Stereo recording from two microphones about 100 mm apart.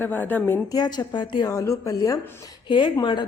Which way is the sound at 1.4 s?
30° left (ahead or behind).